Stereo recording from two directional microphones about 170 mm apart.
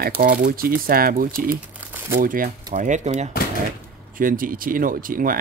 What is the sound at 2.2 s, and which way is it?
Speech, 55° right (ahead or behind).